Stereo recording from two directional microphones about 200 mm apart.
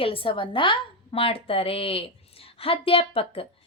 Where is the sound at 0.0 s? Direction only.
25° left (ahead or behind).